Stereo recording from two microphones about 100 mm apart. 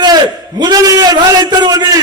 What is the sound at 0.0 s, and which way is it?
A man's voice, 45° right (ahead or behind).